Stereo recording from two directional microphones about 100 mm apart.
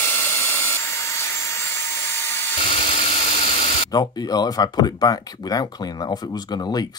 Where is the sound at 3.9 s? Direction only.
40° left (ahead or behind).